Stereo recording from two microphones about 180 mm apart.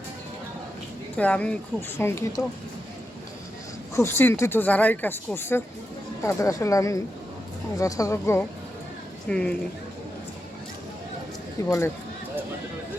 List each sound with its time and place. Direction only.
1.1 s speech: 5° left (ahead or behind)
3.9 s speech: 15° left (ahead or behind)
9.3 s speech: 5° left (ahead or behind)
11.6 s speech: 20° left (ahead or behind)